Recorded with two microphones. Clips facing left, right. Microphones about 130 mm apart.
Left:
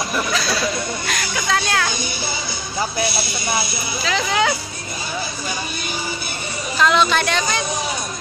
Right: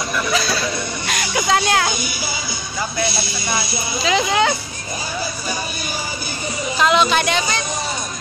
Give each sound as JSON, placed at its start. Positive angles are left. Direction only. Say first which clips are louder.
{"t": 1.0, "sound": "a sound", "louder": "right 3 dB", "side_deg": -20}
{"t": 3.0, "sound": "speech", "louder": "even", "side_deg": 25}
{"t": 3.7, "sound": "speech", "louder": "right 4 dB", "side_deg": -20}
{"t": 4.3, "sound": "speech", "louder": "left 1 dB", "side_deg": -10}
{"t": 6.8, "sound": "speech", "louder": "right 1 dB", "side_deg": -10}